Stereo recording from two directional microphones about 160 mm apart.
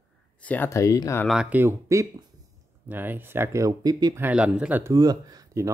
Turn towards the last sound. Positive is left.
turn(degrees=-20)  # may be behind; listen again after turning